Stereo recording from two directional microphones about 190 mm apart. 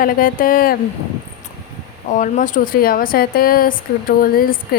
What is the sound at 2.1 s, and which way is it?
Speech, 45° left (ahead or behind).